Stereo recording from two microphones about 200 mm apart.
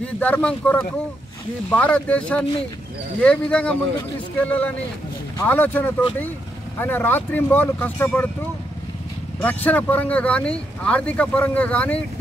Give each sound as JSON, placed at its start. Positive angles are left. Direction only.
{"t": 0.0, "sound": "speech", "side_deg": 5}
{"t": 9.4, "sound": "speech", "side_deg": 10}